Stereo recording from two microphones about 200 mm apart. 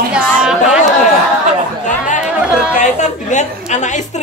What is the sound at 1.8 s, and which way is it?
Speech, 40° left (ahead or behind).